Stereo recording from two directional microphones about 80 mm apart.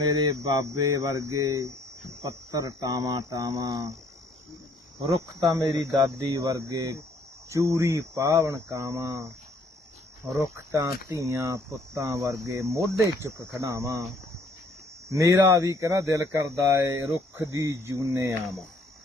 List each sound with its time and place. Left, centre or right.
0.0 s speech: right
4.9 s speech: right
6.3 s speech: right
10.5 s speech: right
15.1 s speech: right